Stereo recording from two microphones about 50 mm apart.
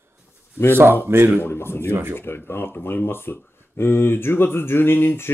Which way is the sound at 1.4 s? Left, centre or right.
Left.